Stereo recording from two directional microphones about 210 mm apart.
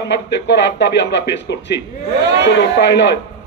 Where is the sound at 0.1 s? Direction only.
55° left (ahead or behind).